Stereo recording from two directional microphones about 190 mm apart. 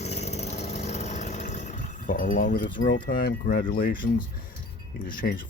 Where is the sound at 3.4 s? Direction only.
45° left (ahead or behind).